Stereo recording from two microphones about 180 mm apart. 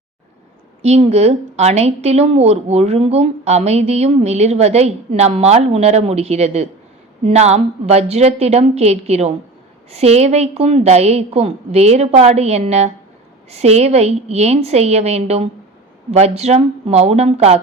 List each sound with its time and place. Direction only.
0.8 s a woman's voice: 35° right (ahead or behind)